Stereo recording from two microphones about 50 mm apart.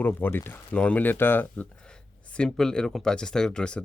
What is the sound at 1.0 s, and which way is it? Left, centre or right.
Speech, left.